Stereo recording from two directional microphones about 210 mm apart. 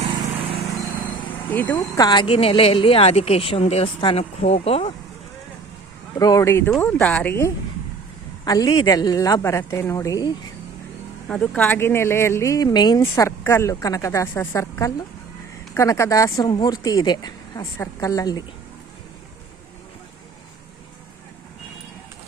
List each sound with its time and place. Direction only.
1.5 s speech: 10° left (ahead or behind)
1.7 s a woman's voice: 20° left (ahead or behind)
6.1 s speech: 15° left (ahead or behind)
11.3 s speech: 5° left (ahead or behind)